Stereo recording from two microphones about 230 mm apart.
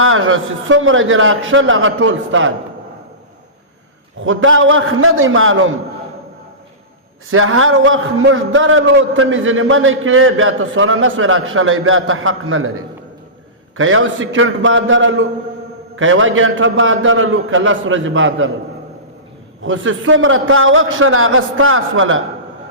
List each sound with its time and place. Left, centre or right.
0.0 s a man's voice: right
4.2 s a man's voice: right
7.3 s a man's voice: right
19.6 s a man's voice: right